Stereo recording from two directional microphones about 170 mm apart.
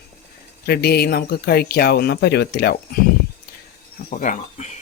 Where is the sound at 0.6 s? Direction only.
70° left (ahead or behind).